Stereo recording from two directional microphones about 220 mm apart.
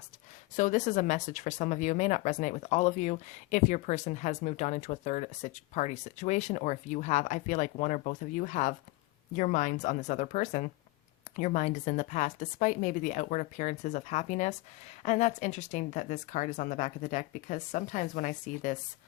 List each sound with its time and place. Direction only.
0.5 s speech: 35° left (ahead or behind)